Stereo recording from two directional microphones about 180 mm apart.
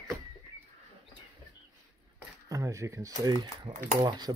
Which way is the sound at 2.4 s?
20° right (ahead or behind).